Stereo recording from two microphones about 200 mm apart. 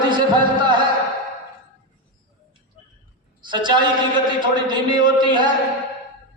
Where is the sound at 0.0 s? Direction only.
20° right (ahead or behind).